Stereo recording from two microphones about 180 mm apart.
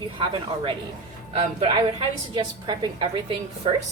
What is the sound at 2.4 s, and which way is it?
Speech, 25° right (ahead or behind).